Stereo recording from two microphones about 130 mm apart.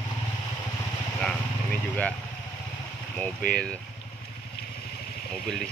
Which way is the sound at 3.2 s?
10° left (ahead or behind).